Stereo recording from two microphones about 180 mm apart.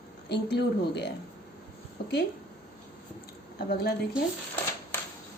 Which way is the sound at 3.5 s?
60° left (ahead or behind).